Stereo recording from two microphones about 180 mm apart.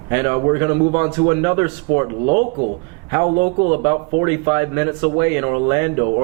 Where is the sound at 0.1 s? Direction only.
15° right (ahead or behind).